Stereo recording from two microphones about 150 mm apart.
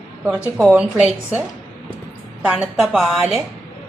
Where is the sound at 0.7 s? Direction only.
10° right (ahead or behind).